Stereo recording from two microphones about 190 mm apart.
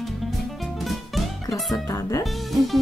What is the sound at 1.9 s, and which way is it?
Speech, 15° left (ahead or behind).